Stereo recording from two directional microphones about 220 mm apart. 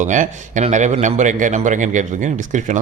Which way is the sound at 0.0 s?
35° right (ahead or behind).